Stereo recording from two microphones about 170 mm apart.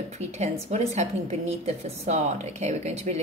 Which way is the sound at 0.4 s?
40° right (ahead or behind).